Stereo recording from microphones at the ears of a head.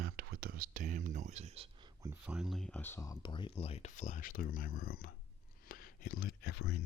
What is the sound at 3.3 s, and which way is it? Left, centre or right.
Speech, left.